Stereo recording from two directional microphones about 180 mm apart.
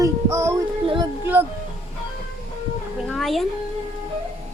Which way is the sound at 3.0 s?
Centre (ahead or behind).